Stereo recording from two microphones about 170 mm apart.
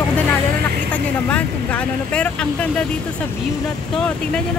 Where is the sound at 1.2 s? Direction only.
10° left (ahead or behind).